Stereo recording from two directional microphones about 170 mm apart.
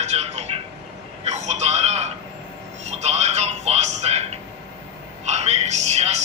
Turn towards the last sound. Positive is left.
turn(degrees=-40)  # may be behind; listen again after turning